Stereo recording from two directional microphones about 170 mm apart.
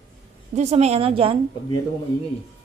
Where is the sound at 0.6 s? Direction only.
40° right (ahead or behind).